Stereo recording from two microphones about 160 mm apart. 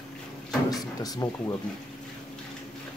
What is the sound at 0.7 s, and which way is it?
Speech, 25° left (ahead or behind).